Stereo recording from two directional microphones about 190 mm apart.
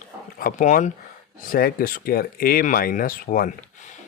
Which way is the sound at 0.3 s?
45° left (ahead or behind).